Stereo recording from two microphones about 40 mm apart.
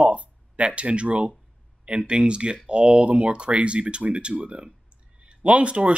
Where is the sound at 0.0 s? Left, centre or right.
Right.